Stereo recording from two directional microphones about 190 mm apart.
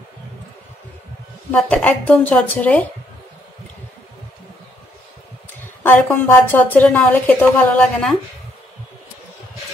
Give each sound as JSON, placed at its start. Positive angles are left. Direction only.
{"t": 1.5, "sound": "a woman's voice", "side_deg": 5}
{"t": 5.9, "sound": "a woman's voice", "side_deg": 10}